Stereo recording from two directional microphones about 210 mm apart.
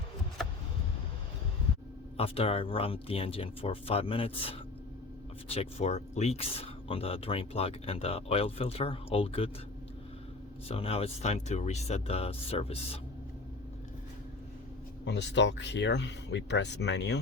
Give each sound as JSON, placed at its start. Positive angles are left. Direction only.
{"t": 2.1, "sound": "speech", "side_deg": 30}
{"t": 10.7, "sound": "speech", "side_deg": 30}
{"t": 15.0, "sound": "speech", "side_deg": 55}